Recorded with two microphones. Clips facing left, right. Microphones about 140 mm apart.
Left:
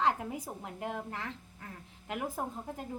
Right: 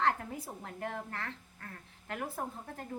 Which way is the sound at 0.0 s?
15° left (ahead or behind).